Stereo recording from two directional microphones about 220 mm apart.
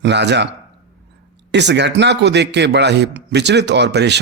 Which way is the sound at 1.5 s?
50° right (ahead or behind).